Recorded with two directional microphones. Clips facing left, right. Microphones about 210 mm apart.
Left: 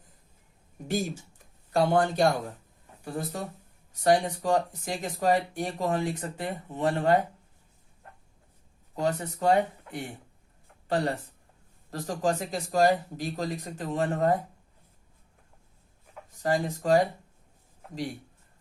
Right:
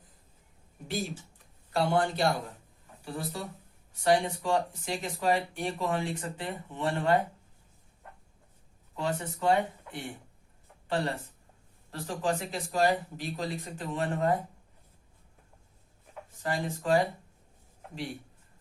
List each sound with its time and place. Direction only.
0.9 s speech: 45° left (ahead or behind)
9.0 s speech: 40° left (ahead or behind)
10.8 s speech: 40° left (ahead or behind)
16.4 s speech: 40° left (ahead or behind)